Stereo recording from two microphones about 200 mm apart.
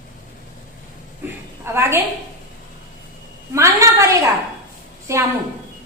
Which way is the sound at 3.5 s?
15° right (ahead or behind).